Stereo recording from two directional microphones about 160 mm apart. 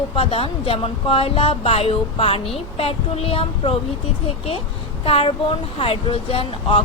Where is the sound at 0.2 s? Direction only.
40° left (ahead or behind).